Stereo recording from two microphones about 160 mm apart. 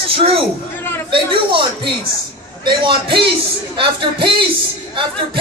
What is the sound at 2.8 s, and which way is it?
Speech, 30° right (ahead or behind).